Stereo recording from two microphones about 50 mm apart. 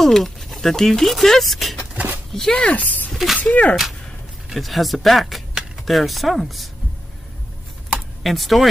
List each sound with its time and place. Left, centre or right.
0.0 s speech: centre
2.6 s speech: left
3.1 s a sound: centre
3.3 s speech: left
4.6 s speech: centre
8.2 s speech: centre